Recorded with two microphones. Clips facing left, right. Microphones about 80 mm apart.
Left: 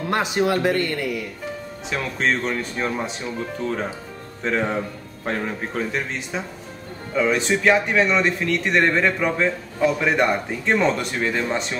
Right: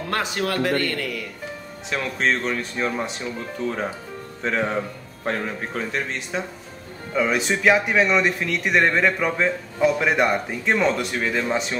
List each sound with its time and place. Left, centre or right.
0.1 s speech: centre
1.9 s a man's voice: centre